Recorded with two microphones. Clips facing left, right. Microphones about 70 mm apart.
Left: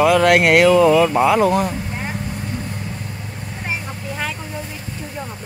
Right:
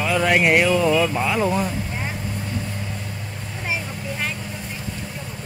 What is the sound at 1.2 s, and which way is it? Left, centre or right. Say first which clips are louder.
Speech: left 6 dB; left.